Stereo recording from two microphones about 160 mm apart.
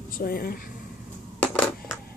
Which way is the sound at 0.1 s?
65° left (ahead or behind).